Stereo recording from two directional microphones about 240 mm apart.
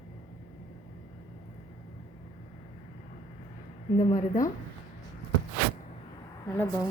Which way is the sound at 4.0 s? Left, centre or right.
Left.